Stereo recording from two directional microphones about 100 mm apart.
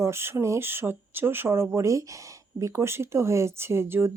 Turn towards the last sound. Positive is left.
turn(degrees=-25)  # may be behind; listen again after turning